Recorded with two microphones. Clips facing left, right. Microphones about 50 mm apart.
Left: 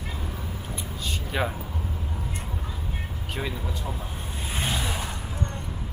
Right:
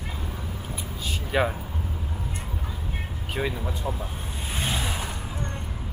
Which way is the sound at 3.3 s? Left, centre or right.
Centre.